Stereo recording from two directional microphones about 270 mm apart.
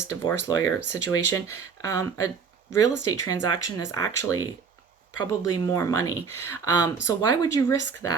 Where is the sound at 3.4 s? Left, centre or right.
Left.